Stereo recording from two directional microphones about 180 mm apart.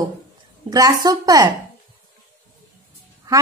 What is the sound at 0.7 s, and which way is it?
Speech, 20° right (ahead or behind).